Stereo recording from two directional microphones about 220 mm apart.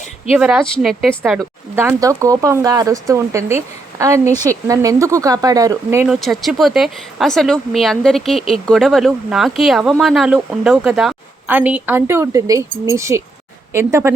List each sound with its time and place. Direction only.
0.3 s speech: 5° right (ahead or behind)
1.7 s a woman's voice: 10° right (ahead or behind)
6.1 s a woman's voice: centre (ahead or behind)